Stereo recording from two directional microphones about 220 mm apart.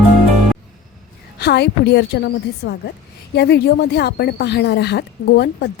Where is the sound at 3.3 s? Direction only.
50° left (ahead or behind).